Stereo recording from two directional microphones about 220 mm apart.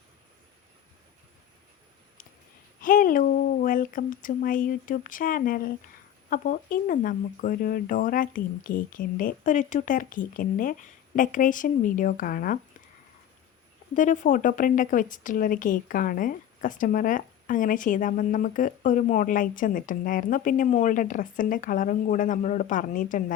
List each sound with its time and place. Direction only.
2.8 s a woman's voice: 40° left (ahead or behind)
13.9 s speech: 35° left (ahead or behind)